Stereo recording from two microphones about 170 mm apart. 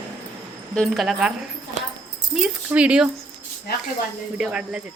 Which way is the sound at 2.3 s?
5° right (ahead or behind).